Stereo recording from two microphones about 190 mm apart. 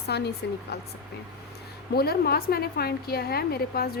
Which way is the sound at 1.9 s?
55° left (ahead or behind).